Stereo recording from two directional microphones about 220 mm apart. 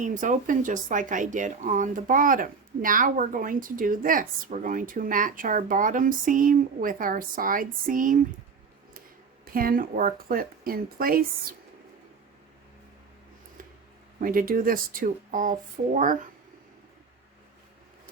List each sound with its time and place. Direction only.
0.0 s speech: 35° right (ahead or behind)
9.4 s speech: 40° right (ahead or behind)
14.2 s speech: 40° right (ahead or behind)